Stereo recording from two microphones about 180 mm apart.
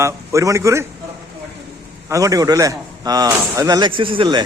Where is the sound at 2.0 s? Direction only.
20° right (ahead or behind).